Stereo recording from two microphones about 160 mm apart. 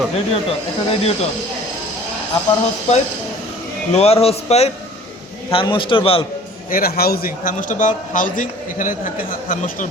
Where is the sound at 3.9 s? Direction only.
40° left (ahead or behind).